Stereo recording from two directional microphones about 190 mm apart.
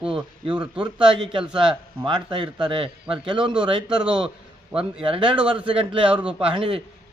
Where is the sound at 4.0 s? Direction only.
5° right (ahead or behind).